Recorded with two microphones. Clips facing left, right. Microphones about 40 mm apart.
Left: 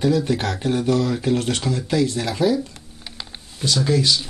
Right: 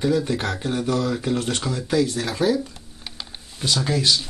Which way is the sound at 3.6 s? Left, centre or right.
Centre.